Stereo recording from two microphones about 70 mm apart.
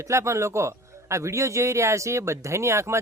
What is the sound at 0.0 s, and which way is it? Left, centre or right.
Speech, right.